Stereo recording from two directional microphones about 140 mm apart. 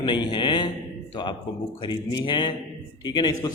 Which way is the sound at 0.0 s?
35° left (ahead or behind).